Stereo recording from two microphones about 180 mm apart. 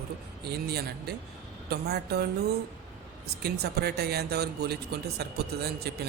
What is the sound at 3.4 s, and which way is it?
Speech, 65° right (ahead or behind).